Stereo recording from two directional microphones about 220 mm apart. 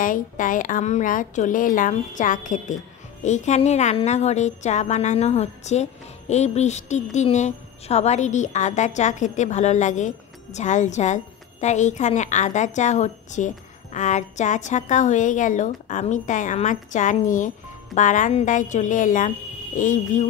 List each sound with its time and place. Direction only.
0.0 s a woman's voice: 35° left (ahead or behind)